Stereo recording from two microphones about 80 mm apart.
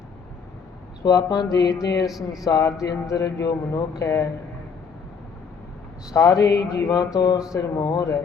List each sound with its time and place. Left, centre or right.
1.0 s speech: left
6.1 s speech: left